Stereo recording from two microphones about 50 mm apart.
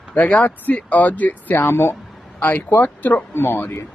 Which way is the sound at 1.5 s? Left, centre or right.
Left.